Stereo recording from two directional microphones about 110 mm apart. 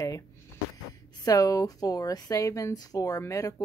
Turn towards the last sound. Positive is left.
turn(degrees=30)  # may be behind; listen again after turning